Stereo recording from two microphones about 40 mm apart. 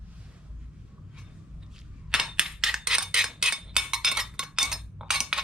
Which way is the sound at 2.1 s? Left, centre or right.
Centre.